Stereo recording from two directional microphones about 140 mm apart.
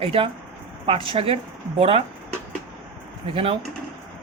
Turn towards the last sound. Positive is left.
turn(degrees=-40)  # may be behind; listen again after turning